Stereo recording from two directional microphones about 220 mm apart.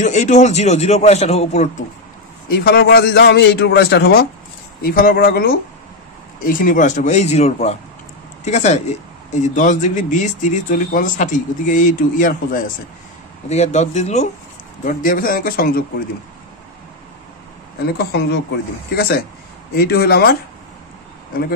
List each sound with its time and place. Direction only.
0.0 s speech: 35° left (ahead or behind)
2.6 s a man's voice: 50° left (ahead or behind)
17.8 s a man's voice: 45° left (ahead or behind)